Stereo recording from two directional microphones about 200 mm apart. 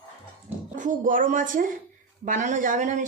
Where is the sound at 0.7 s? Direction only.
40° right (ahead or behind).